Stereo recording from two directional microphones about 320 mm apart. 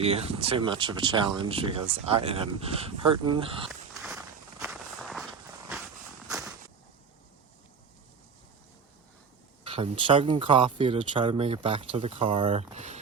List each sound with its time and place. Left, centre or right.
0.0 s speech: centre
4.6 s walk: centre
9.6 s speech: centre